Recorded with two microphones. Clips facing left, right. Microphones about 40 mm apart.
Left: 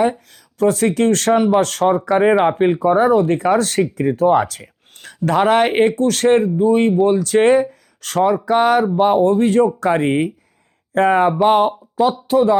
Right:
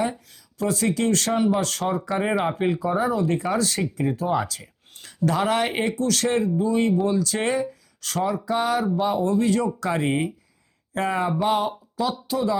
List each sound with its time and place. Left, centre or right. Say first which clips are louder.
0.0 s speech: left 9 dB; left
2.2 s speech: left 10 dB; left